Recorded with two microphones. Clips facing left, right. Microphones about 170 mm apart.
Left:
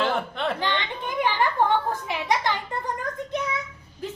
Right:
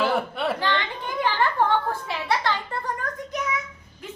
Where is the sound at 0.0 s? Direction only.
5° right (ahead or behind).